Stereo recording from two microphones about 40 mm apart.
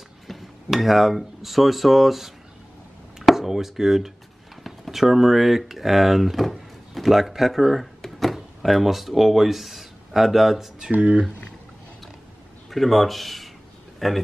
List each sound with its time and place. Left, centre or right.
0.3 s speech: centre
8.0 s a sound: centre
8.4 s speech: centre
10.9 s speech: right
12.6 s speech: centre